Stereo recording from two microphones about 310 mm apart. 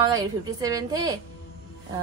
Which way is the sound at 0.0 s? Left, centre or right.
Centre.